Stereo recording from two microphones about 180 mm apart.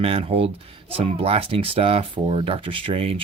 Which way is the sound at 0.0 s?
30° right (ahead or behind).